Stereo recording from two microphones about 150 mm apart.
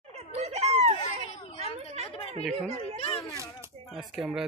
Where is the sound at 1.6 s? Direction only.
45° right (ahead or behind).